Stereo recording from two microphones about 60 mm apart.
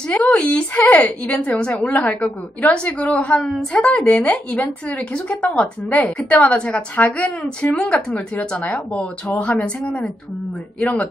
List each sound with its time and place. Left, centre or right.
0.0 s a woman's voice: left